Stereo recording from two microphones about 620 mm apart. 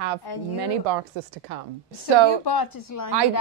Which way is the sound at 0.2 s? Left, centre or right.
Left.